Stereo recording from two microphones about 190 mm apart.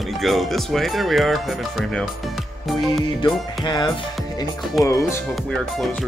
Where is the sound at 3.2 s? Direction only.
25° left (ahead or behind).